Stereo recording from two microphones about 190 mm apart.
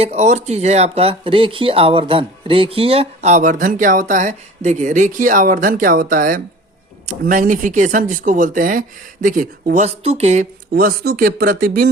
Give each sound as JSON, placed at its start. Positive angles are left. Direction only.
{"t": 0.0, "sound": "speech", "side_deg": -35}
{"t": 10.8, "sound": "speech", "side_deg": -50}